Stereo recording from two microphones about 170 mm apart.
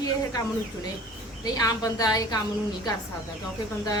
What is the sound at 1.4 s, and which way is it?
Speech, 20° left (ahead or behind).